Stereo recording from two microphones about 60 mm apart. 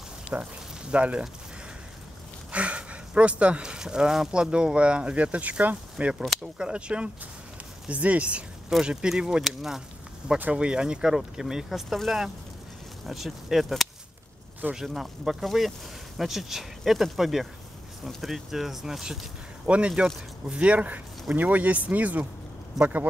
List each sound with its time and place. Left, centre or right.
0.3 s speech: right
2.5 s speech: right; by 9.8 s centre
10.5 s speech: centre
19.6 s speech: right